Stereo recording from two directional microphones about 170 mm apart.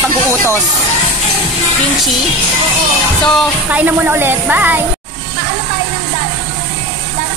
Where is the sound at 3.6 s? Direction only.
10° right (ahead or behind).